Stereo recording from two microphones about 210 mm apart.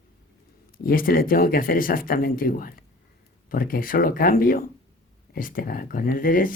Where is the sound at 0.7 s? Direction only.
45° left (ahead or behind).